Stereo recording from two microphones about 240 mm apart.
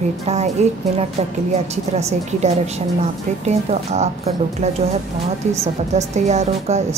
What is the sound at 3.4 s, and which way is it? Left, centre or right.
Speech, right.